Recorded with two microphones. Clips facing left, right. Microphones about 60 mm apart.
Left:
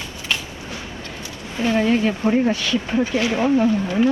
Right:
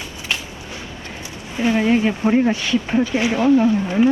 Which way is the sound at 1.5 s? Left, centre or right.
Right.